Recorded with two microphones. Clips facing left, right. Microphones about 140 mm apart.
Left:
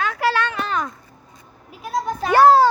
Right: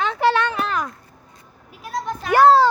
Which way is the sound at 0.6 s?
5° right (ahead or behind).